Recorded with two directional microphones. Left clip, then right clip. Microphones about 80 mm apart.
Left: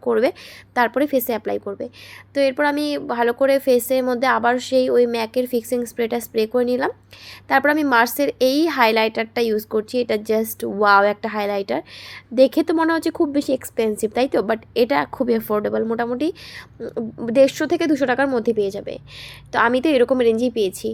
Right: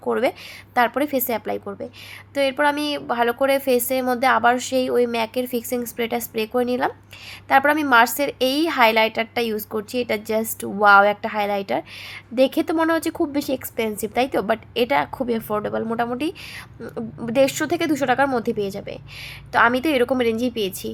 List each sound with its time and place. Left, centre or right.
0.0 s a woman's voice: left
12.7 s a woman's voice: left
16.8 s a woman's voice: left